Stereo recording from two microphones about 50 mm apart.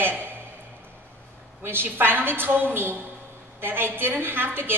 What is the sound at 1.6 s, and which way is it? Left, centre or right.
A woman's voice, right.